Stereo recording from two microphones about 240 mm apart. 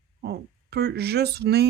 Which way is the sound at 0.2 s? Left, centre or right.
Right.